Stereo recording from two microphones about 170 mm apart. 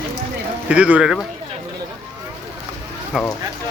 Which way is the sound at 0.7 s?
5° right (ahead or behind).